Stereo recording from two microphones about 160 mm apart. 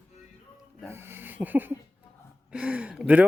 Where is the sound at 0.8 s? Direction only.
15° right (ahead or behind).